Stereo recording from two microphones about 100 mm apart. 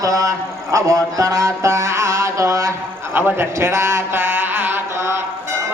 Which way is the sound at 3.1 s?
25° right (ahead or behind).